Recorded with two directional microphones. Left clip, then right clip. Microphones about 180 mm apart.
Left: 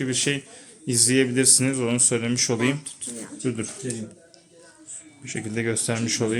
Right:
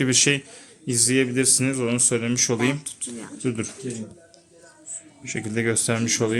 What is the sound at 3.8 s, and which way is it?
Speech, 55° left (ahead or behind).